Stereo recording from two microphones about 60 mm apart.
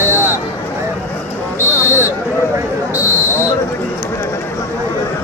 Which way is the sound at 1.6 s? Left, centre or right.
Right.